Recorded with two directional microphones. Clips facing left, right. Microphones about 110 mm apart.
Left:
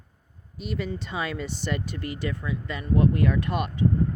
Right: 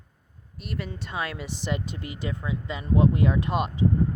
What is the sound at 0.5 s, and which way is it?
Speech, centre (ahead or behind).